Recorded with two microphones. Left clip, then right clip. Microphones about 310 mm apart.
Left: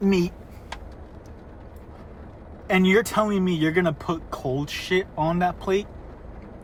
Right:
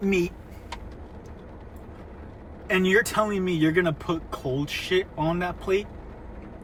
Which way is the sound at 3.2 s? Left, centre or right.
Centre.